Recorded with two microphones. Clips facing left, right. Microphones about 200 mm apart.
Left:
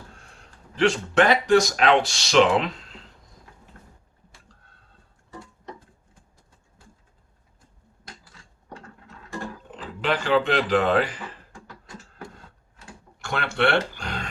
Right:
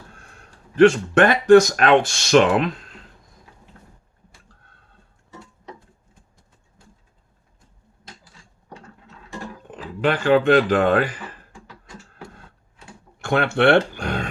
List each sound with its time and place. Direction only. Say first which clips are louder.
0.2 s speech: right 2 dB; 55° right (ahead or behind)
10.0 s speech: right 5 dB; 55° right (ahead or behind)
13.2 s speech: right 7 dB; 55° right (ahead or behind)